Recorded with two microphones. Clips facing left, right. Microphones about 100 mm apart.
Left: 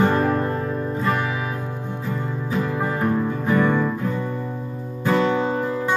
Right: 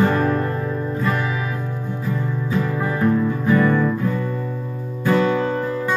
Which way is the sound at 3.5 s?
15° left (ahead or behind).